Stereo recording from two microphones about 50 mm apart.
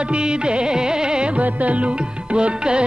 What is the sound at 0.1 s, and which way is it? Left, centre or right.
Music, centre.